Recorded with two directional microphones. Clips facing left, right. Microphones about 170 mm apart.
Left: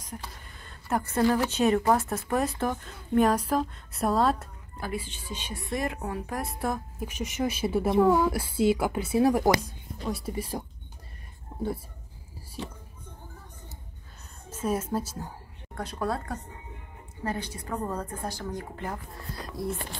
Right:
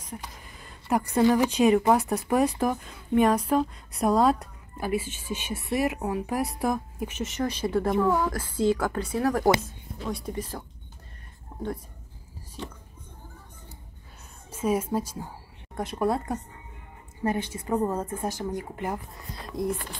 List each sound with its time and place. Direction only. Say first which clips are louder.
0.0 s a sound: right 1 dB; 10° right (ahead or behind)
1.5 s a woman's voice: right 3 dB; centre (ahead or behind)
1.9 s speech: right 3 dB; 15° right (ahead or behind)
2.6 s a woman's voice: right 3 dB; 5° right (ahead or behind)
4.7 s a woman's voice: right 6 dB; 10° right (ahead or behind); by 10.6 s 10° left (ahead or behind)
14.5 s a woman's voice: right 3 dB; 10° right (ahead or behind)